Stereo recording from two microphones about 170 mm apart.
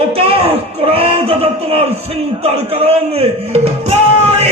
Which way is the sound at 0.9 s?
35° right (ahead or behind).